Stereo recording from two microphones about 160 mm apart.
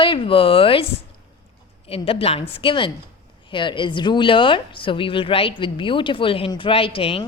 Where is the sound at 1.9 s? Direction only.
35° left (ahead or behind).